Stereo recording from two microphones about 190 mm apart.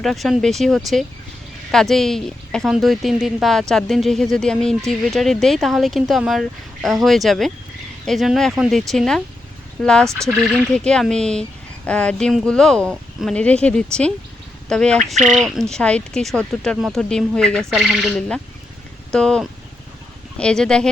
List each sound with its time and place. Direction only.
0.0 s a woman's voice: centre (ahead or behind)
10.1 s speech: 15° right (ahead or behind)
10.6 s a woman's voice: 5° left (ahead or behind)